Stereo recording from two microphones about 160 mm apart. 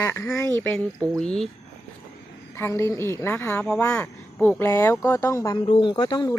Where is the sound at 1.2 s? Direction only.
5° left (ahead or behind).